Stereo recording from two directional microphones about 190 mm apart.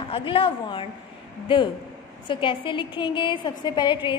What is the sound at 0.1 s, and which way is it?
Speech, 30° left (ahead or behind).